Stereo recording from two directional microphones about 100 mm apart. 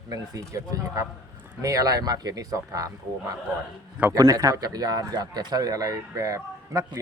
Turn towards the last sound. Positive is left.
turn(degrees=-35)  # may be behind; listen again after turning